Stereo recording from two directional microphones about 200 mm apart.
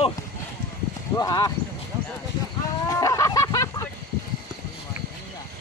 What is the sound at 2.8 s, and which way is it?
Chicken, 15° left (ahead or behind).